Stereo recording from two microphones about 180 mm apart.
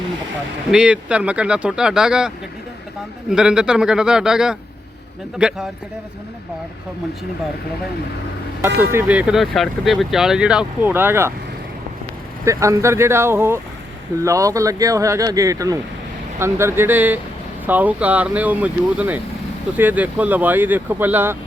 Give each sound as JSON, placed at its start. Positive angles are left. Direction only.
{"t": 0.7, "sound": "speech", "side_deg": -5}
{"t": 8.6, "sound": "speech", "side_deg": -10}
{"t": 12.5, "sound": "speech", "side_deg": -15}